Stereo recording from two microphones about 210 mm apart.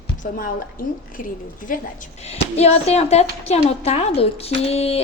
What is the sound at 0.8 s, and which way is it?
A woman's voice, 40° left (ahead or behind).